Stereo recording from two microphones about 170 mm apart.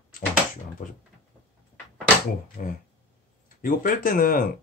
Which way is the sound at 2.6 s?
55° left (ahead or behind).